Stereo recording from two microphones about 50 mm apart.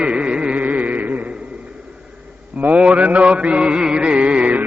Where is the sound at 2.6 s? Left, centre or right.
Right.